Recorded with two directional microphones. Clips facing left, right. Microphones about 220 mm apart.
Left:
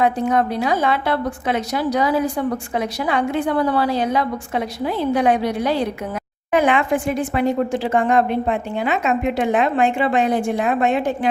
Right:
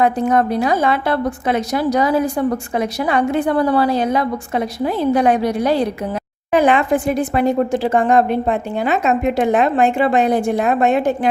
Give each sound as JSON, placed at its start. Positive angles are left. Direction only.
{"t": 0.0, "sound": "a woman's voice", "side_deg": -45}